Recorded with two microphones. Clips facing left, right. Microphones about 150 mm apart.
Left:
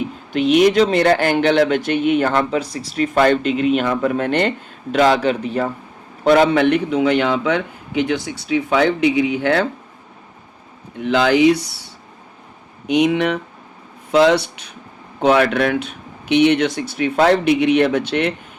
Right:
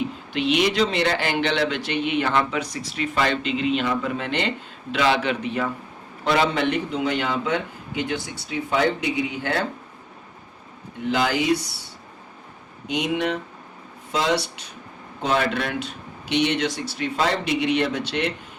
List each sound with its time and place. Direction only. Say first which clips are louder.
0.3 s speech: left 8 dB; 45° left (ahead or behind)
6.2 s a man's voice: left 8 dB; 50° left (ahead or behind); by 9.6 s 70° left (ahead or behind)
11.0 s a man's voice: left 9 dB; 75° left (ahead or behind)
12.9 s a man's voice: left 8 dB; 70° left (ahead or behind)